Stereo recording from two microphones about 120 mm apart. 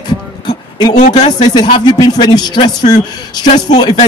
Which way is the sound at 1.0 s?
85° left.